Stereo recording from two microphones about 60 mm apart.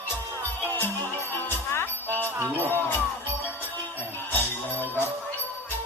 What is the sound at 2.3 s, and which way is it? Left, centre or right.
Music, right.